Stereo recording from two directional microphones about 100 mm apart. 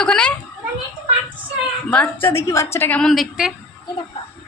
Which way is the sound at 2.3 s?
30° left (ahead or behind).